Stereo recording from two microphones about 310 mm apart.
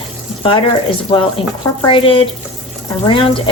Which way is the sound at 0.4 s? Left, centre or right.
Centre.